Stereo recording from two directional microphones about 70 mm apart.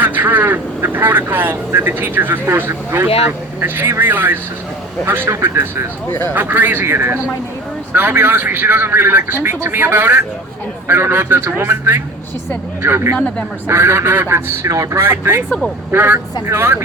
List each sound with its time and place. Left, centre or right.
0.0 s a man's voice: right
6.1 s speech: left
6.3 s a man's voice: right
13.1 s speech: centre
13.7 s a man's voice: right
14.7 s speech: right
15.0 s a man's voice: right